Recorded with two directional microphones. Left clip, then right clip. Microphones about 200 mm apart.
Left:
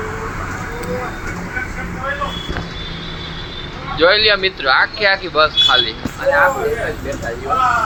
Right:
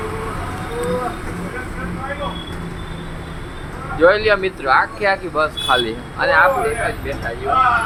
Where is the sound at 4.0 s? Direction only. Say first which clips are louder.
Left 1 dB; 10° right (ahead or behind).